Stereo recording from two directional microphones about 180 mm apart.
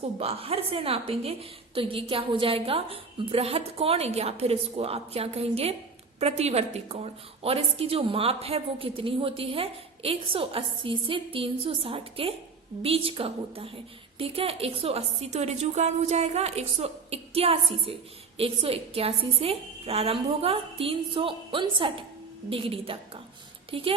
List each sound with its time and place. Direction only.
0.2 s a woman's voice: 35° right (ahead or behind)